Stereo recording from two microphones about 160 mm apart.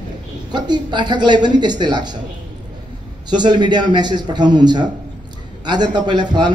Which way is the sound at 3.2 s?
25° right (ahead or behind).